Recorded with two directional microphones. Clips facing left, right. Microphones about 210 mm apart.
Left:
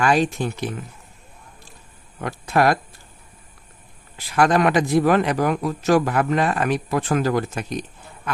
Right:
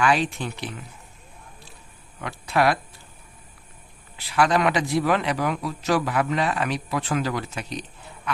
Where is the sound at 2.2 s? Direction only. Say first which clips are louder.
Left 3 dB; 45° left (ahead or behind).